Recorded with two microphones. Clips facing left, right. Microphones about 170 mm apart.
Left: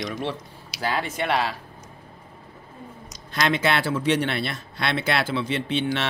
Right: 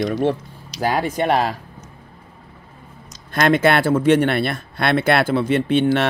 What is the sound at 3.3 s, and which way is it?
Speech, 50° right (ahead or behind).